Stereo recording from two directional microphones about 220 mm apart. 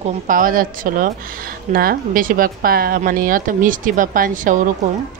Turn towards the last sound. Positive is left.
turn(degrees=-35)  # may be behind; listen again after turning